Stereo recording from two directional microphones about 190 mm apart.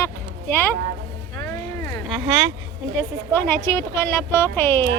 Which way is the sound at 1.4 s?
20° left (ahead or behind).